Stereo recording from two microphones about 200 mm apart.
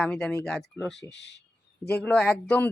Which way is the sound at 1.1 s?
60° left (ahead or behind).